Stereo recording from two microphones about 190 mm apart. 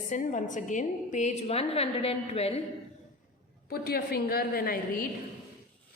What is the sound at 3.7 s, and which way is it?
A woman's voice, 55° left (ahead or behind).